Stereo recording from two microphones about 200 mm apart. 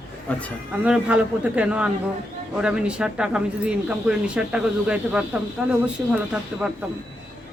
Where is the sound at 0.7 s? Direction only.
5° right (ahead or behind).